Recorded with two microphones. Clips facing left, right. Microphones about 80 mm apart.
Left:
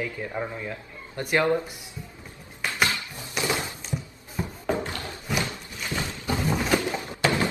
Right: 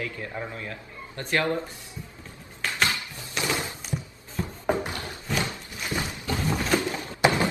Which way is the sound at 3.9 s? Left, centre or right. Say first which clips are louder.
Even; centre.